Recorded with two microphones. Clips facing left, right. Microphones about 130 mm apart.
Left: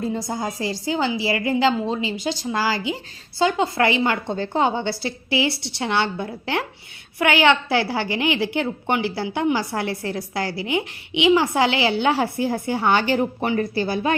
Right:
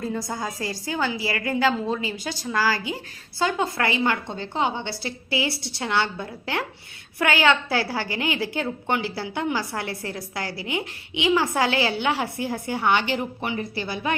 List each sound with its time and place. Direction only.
0.0 s a woman's voice: 25° left (ahead or behind)
4.4 s a woman's voice: 40° left (ahead or behind)